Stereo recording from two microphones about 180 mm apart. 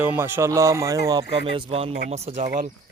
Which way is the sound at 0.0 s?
10° right (ahead or behind).